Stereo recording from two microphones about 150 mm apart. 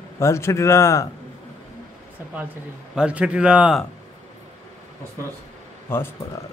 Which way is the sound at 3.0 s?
10° right (ahead or behind).